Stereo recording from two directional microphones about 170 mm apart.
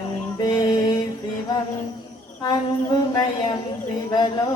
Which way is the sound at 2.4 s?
25° left (ahead or behind).